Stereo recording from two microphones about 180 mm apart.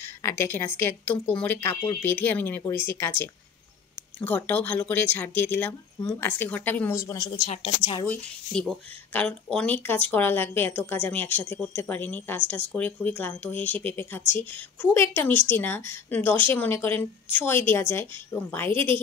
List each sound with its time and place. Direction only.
0.0 s speech: 15° left (ahead or behind)
7.4 s a woman's voice: 35° left (ahead or behind)
8.1 s speech: 5° left (ahead or behind)